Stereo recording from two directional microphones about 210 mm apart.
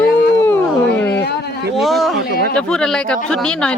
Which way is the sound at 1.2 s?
50° left (ahead or behind).